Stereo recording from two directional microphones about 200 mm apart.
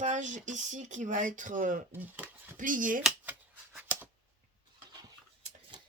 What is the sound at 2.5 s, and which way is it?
Speech, 40° right (ahead or behind).